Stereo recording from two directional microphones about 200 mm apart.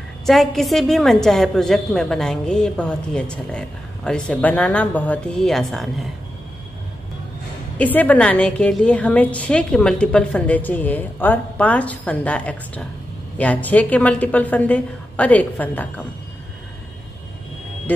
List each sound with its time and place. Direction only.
0.3 s a woman's voice: centre (ahead or behind)
7.7 s a woman's voice: 10° left (ahead or behind)